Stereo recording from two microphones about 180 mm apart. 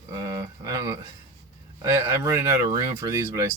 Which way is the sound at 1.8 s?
15° right (ahead or behind).